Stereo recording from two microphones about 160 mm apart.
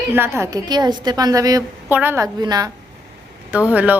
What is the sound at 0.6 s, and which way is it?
A woman's voice, 25° right (ahead or behind).